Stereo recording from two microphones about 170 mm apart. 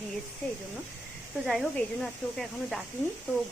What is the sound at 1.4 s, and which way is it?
Speech, 5° left (ahead or behind).